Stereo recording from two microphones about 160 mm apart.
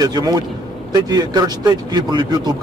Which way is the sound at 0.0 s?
25° right (ahead or behind).